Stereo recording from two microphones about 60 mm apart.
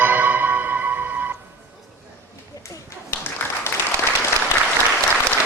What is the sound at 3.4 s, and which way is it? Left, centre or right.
Applause, left.